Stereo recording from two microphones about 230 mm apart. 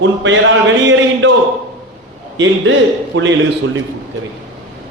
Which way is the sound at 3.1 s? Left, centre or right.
Right.